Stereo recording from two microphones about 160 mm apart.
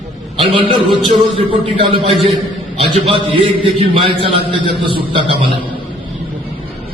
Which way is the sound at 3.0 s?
35° right (ahead or behind).